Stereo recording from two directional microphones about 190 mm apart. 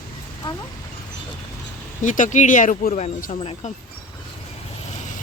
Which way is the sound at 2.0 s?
40° left (ahead or behind).